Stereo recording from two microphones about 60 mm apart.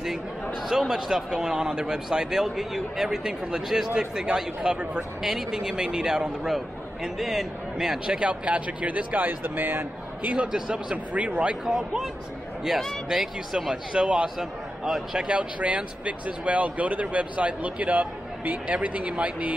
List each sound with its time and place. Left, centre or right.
0.7 s speech: centre
8.2 s speech: right
10.3 s speech: centre
11.6 s speech: centre; by 19.5 s right